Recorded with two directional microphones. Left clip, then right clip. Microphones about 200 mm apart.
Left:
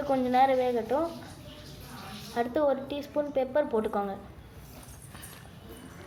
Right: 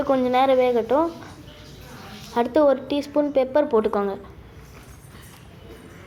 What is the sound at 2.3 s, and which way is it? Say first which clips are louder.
A woman's voice: right 9 dB; 20° right (ahead or behind).